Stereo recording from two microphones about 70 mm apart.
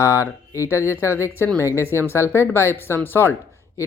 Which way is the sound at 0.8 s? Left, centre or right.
Right.